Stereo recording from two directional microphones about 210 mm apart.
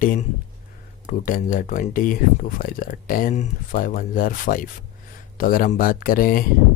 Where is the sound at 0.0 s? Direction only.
40° left (ahead or behind).